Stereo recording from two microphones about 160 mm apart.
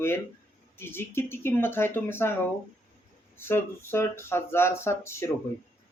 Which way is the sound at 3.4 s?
15° left (ahead or behind).